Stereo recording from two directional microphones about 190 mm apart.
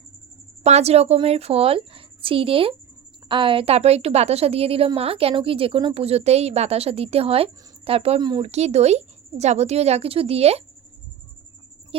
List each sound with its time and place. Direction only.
0.6 s a woman's voice: 35° right (ahead or behind)